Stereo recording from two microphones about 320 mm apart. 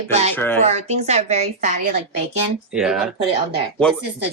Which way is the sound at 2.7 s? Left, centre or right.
Centre.